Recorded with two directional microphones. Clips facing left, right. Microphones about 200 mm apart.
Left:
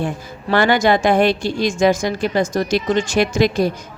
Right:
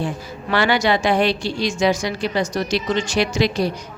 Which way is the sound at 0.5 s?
50° left (ahead or behind).